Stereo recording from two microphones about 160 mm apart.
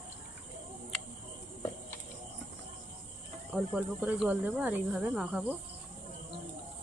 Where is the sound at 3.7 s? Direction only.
10° right (ahead or behind).